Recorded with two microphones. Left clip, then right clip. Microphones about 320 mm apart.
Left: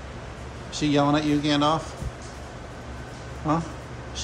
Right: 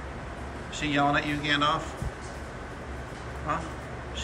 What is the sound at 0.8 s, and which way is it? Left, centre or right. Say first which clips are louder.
Speech: left 3 dB; centre.